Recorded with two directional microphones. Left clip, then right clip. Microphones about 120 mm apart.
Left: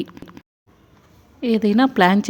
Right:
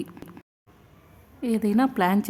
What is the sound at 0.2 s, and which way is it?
Squish, centre (ahead or behind).